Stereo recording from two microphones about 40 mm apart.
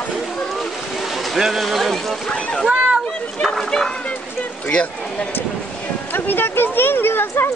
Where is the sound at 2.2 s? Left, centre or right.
Left.